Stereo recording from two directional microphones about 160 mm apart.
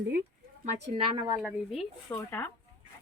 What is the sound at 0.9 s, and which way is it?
Speech, 35° right (ahead or behind).